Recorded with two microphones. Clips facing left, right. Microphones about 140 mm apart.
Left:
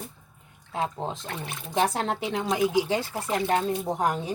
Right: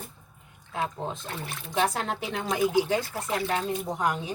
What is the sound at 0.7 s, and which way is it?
Speech, 30° left (ahead or behind).